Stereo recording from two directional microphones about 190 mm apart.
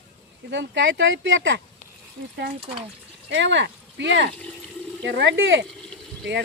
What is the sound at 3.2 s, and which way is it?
Speech, 70° right (ahead or behind).